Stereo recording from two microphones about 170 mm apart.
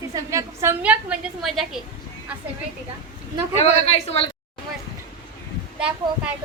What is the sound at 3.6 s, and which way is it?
Speech, 40° left (ahead or behind).